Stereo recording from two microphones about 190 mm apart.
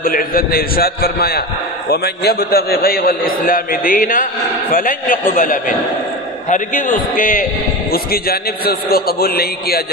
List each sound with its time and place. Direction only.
0.0 s a man's voice: 50° left (ahead or behind)